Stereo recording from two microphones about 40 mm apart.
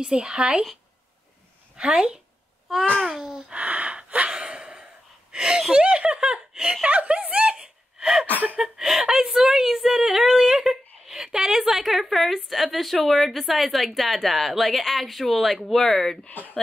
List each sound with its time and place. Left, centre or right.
0.0 s speech: centre
1.8 s speech: centre
3.5 s gasp: right
5.3 s a sound: right
5.7 s giggle: right
6.9 s a sound: right
8.5 s a woman's voice: centre
16.3 s speech: left